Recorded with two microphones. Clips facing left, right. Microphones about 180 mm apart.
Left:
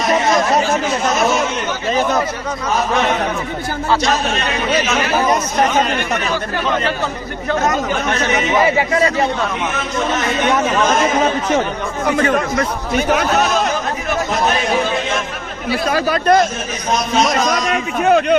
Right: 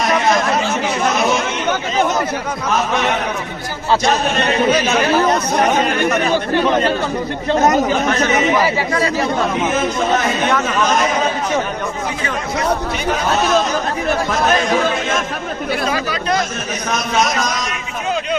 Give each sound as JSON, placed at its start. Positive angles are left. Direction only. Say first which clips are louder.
{"t": 15.9, "sound": "speech", "louder": "left 5 dB", "side_deg": 50}
{"t": 18.0, "sound": "a man's voice", "louder": "left 8 dB", "side_deg": 60}